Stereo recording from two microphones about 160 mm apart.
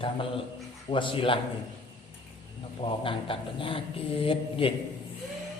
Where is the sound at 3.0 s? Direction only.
35° left (ahead or behind).